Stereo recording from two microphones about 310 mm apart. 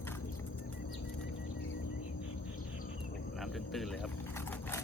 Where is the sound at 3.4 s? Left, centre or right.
Centre.